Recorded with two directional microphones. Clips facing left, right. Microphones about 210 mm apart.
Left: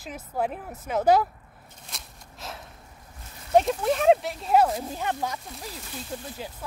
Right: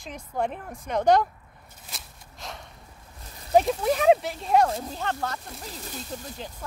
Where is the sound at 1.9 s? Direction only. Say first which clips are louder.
Even; centre (ahead or behind).